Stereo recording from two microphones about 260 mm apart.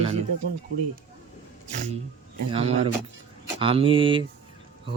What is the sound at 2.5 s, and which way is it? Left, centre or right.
Speech, right.